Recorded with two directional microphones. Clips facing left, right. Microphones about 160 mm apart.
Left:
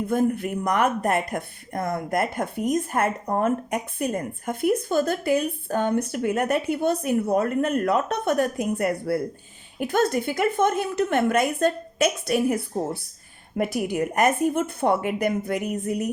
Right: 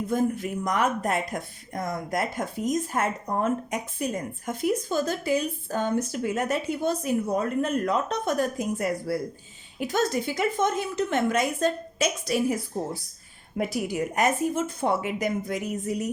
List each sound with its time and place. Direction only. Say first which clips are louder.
0.1 s speech: left 3 dB; 60° left (ahead or behind)
13.6 s speech: left 3 dB; 55° left (ahead or behind)